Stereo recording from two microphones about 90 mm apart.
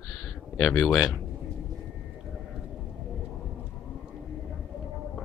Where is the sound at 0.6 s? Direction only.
Centre (ahead or behind).